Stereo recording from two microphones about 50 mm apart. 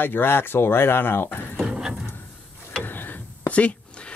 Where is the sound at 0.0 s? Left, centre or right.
Left.